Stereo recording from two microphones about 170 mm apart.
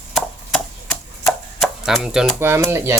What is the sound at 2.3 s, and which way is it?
Speech, 15° right (ahead or behind).